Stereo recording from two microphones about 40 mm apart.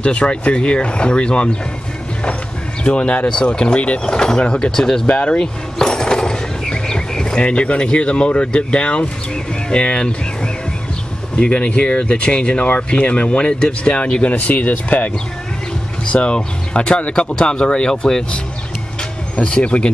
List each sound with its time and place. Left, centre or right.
0.0 s speech: left
2.8 s speech: left
4.0 s speech: centre
5.1 s speech: left
5.8 s a sound: centre
7.4 s speech: left
12.6 s speech: left
14.3 s speech: left
16.1 s speech: left
19.4 s speech: left